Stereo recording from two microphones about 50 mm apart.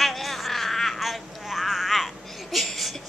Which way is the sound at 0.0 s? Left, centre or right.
Centre.